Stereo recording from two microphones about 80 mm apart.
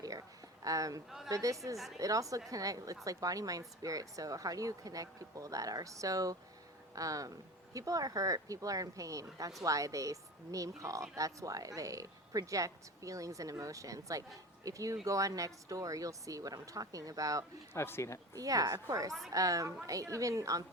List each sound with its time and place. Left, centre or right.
0.0 s a sound: right
1.3 s a woman's voice: right
17.7 s speech: left
18.3 s a woman's voice: right